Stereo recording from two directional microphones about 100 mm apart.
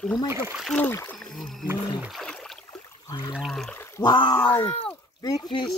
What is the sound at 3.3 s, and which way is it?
Speech, centre (ahead or behind).